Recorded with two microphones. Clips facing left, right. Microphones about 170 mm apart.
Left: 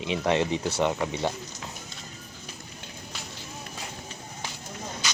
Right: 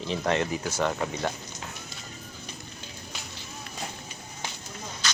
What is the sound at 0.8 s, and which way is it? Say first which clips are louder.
Speech: left 1 dB; 10° left (ahead or behind).